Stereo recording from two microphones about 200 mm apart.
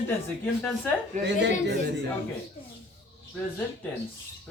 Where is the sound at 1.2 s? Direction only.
60° right (ahead or behind).